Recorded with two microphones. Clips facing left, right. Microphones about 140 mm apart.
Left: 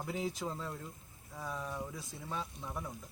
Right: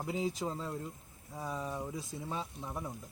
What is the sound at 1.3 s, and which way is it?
Speech, 20° right (ahead or behind).